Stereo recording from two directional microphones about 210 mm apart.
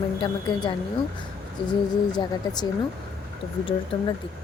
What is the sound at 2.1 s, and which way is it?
Speech, 20° left (ahead or behind).